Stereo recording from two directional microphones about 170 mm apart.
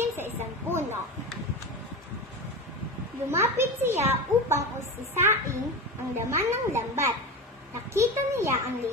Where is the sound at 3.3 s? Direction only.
15° right (ahead or behind).